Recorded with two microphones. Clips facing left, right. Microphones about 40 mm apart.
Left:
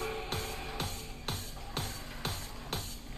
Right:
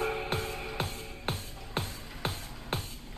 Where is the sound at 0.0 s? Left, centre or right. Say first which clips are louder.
Right 5 dB; right.